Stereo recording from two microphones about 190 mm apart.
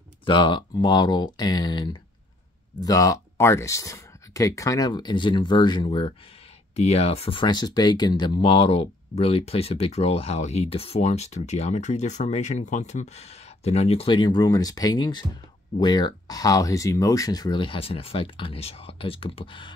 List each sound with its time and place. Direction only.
0.2 s speech: 25° left (ahead or behind)